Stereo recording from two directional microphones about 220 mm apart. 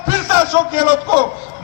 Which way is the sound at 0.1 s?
10° right (ahead or behind).